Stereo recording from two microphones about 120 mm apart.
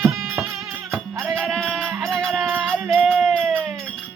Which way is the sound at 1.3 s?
Centre (ahead or behind).